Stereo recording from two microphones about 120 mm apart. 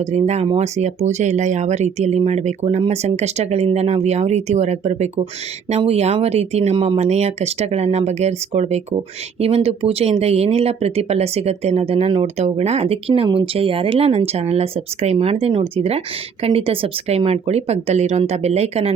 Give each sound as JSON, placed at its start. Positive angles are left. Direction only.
{"t": 0.1, "sound": "speech", "side_deg": -65}
{"t": 6.7, "sound": "speech", "side_deg": -45}
{"t": 7.0, "sound": "speech", "side_deg": -65}
{"t": 9.4, "sound": "speech", "side_deg": -55}